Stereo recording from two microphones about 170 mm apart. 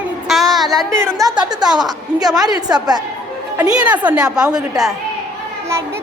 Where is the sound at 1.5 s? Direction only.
5° right (ahead or behind).